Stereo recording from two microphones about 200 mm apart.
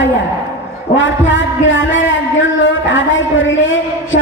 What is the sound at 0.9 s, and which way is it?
A man's voice, 70° left (ahead or behind).